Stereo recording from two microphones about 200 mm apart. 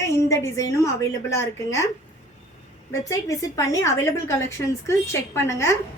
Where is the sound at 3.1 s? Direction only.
15° left (ahead or behind).